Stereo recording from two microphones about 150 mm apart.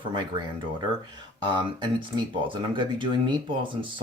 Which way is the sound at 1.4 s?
30° right (ahead or behind).